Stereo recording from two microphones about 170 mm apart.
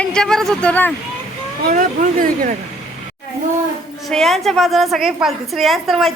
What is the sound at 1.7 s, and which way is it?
Speech, 55° right (ahead or behind).